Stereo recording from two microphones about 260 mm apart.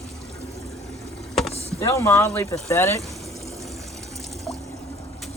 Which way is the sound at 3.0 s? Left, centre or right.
Centre.